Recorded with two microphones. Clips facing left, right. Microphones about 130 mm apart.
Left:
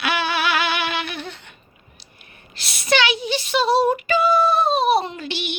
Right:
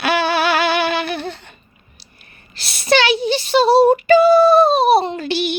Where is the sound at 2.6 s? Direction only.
30° right (ahead or behind).